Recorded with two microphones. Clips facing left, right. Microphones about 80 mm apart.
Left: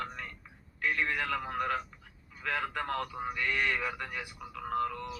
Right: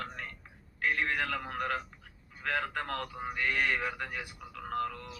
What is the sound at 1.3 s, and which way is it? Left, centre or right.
A man's voice, left.